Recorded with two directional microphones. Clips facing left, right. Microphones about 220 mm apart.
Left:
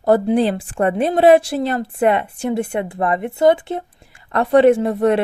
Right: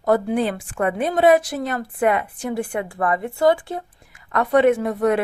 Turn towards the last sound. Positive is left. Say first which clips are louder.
# left 3 dB
turn(degrees=30)  # may be behind; listen again after turning